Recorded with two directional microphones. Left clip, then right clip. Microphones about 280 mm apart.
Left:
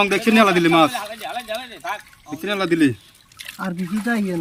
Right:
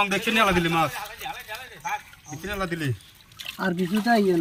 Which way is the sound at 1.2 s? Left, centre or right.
Left.